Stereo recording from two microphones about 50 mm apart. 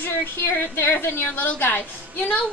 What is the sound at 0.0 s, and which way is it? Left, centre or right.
A woman's voice, left.